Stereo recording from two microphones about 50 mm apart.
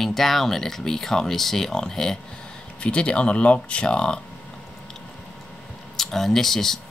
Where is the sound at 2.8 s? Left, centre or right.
Left.